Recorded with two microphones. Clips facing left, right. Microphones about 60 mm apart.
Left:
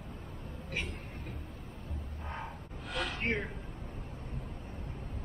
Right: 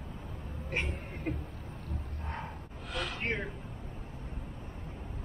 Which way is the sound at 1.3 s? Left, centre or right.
Right.